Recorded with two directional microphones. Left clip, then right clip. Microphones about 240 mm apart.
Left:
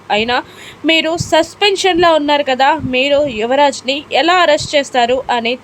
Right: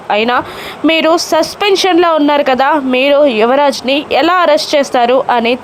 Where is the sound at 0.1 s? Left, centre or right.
Centre.